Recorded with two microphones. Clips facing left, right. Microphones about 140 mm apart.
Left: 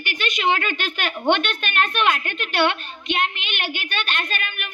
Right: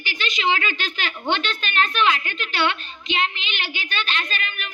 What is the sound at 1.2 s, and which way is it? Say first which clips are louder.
A woman's voice: left 4 dB; 55° left (ahead or behind).